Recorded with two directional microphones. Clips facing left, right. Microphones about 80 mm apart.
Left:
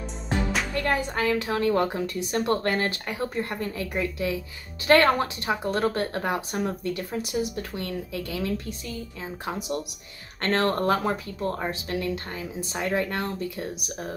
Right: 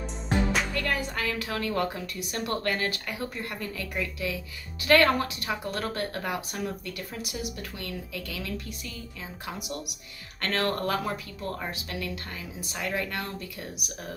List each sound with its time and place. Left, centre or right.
0.7 s speech: left